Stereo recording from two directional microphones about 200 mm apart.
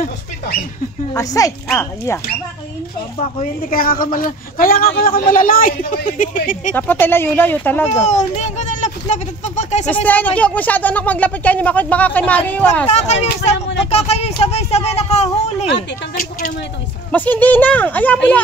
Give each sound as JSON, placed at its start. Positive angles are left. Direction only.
{"t": 1.1, "sound": "speech", "side_deg": 15}
{"t": 3.2, "sound": "a man's voice", "side_deg": 40}
{"t": 6.7, "sound": "speech", "side_deg": 10}
{"t": 8.0, "sound": "a child's voice", "side_deg": 35}
{"t": 10.0, "sound": "speech", "side_deg": 10}
{"t": 12.9, "sound": "speech", "side_deg": 35}
{"t": 16.2, "sound": "speech", "side_deg": 40}
{"t": 17.1, "sound": "speech", "side_deg": 10}